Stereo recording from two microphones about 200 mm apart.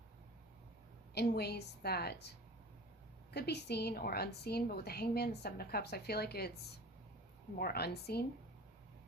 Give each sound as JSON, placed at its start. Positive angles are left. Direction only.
{"t": 1.1, "sound": "a woman's voice", "side_deg": 55}
{"t": 3.3, "sound": "a woman's voice", "side_deg": 55}
{"t": 7.6, "sound": "a woman's voice", "side_deg": 50}